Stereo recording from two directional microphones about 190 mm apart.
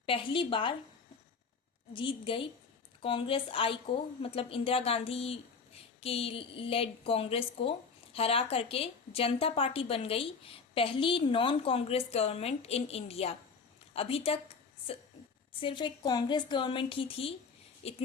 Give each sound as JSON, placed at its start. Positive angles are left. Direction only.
{"t": 0.0, "sound": "a woman's voice", "side_deg": 25}
{"t": 1.9, "sound": "a woman's voice", "side_deg": 25}
{"t": 13.9, "sound": "a sound", "side_deg": 30}
{"t": 15.6, "sound": "a woman's voice", "side_deg": 25}